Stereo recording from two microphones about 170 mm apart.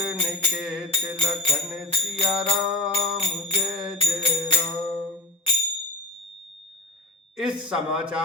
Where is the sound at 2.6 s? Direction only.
5° right (ahead or behind).